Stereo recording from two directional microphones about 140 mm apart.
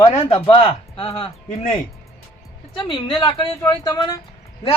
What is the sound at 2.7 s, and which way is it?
A man's voice, 35° left (ahead or behind).